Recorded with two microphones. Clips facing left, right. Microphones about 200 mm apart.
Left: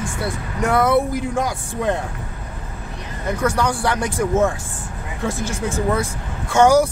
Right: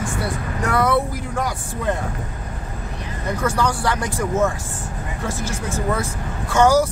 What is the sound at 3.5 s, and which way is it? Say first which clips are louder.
Speech: left 1 dB; 20° left (ahead or behind).